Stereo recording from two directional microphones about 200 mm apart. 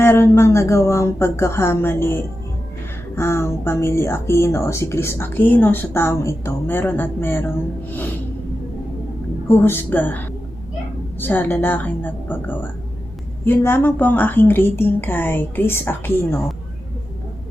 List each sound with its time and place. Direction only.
0.0 s speech: 10° left (ahead or behind)
9.5 s speech: 10° left (ahead or behind)